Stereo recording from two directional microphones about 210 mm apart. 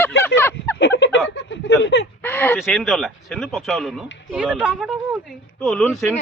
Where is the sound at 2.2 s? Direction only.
10° left (ahead or behind).